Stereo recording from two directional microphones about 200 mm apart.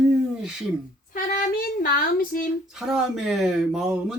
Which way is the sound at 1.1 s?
45° left (ahead or behind).